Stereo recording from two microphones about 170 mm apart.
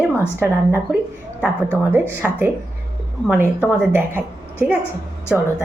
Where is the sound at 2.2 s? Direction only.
5° right (ahead or behind).